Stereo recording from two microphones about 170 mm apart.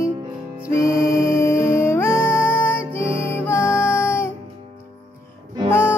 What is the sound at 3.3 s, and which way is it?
Music, 15° left (ahead or behind).